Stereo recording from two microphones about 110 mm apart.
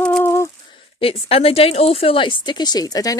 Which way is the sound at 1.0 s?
60° left (ahead or behind).